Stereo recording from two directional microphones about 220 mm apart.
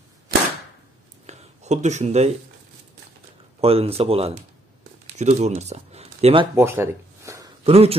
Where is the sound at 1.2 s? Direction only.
30° right (ahead or behind).